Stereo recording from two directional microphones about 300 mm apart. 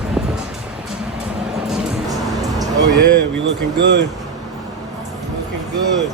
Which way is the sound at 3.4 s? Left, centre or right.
Right.